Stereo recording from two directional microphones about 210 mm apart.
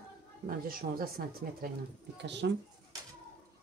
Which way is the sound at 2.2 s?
55° right (ahead or behind).